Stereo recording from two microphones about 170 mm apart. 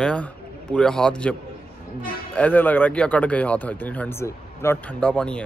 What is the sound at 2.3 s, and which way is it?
Speech, 10° left (ahead or behind).